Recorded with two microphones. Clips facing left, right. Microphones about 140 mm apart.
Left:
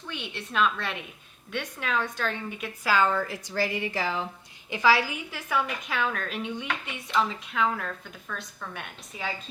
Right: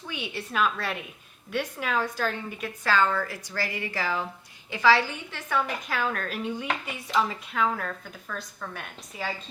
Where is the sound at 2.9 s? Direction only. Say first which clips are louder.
Even; 15° left (ahead or behind).